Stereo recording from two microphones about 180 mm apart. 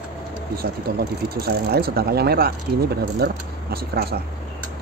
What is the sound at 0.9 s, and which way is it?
Speech, 55° right (ahead or behind).